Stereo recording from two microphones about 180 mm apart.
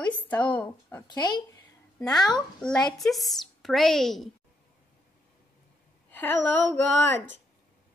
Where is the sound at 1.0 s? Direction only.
25° left (ahead or behind).